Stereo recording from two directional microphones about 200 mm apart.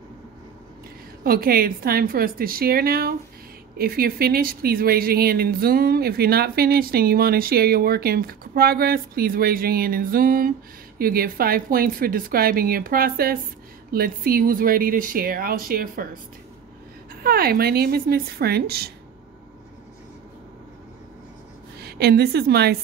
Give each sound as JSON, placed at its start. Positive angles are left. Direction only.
{"t": 1.2, "sound": "speech", "side_deg": -50}
{"t": 17.2, "sound": "speech", "side_deg": -50}
{"t": 21.7, "sound": "a woman's voice", "side_deg": -55}